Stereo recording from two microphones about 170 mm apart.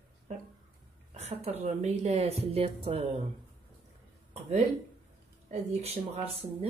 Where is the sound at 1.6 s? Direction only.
40° right (ahead or behind).